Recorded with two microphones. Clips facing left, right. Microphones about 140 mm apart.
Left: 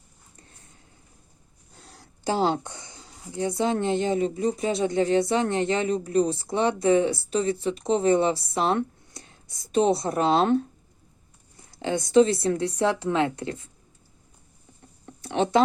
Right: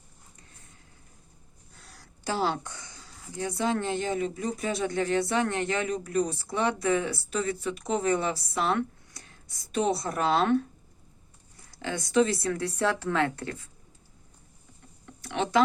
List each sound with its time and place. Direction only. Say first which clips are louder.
1.7 s speech: left 4 dB; 25° left (ahead or behind)
11.7 s speech: left 7 dB; 25° left (ahead or behind)
15.0 s a sound: left 5 dB; 30° left (ahead or behind)